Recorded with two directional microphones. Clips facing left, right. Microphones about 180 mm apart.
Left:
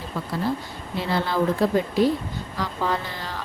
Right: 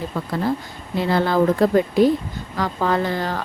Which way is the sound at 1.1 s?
50° right (ahead or behind).